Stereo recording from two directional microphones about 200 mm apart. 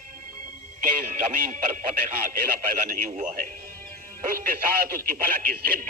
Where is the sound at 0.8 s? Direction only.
40° right (ahead or behind).